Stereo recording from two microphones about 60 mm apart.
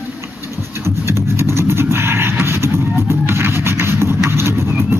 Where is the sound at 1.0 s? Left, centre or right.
Right.